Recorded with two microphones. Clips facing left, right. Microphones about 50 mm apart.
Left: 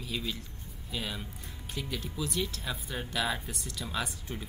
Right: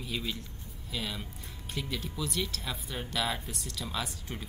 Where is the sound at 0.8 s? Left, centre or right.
Centre.